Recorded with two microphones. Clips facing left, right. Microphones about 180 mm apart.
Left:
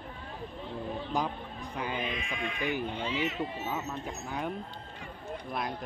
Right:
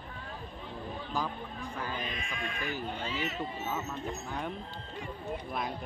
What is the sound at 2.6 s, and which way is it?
Speech, 15° left (ahead or behind).